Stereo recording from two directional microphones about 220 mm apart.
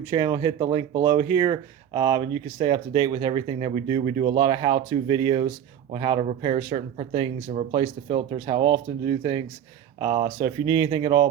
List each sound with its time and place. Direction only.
0.0 s speech: 15° right (ahead or behind)